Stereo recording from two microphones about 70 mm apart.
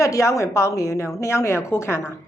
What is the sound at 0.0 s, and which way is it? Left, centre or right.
A woman's voice, left.